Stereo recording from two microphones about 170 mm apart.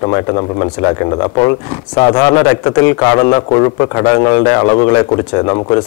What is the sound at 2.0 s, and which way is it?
A man's voice, 20° left (ahead or behind).